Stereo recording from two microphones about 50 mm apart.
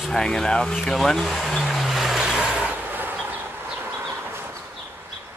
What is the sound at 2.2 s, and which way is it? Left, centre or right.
Vehicle, centre.